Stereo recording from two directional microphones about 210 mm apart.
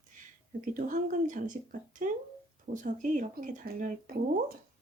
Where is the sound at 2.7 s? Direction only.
35° right (ahead or behind).